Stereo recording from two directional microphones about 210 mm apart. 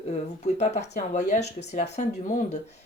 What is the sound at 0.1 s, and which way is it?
Speech, 35° left (ahead or behind).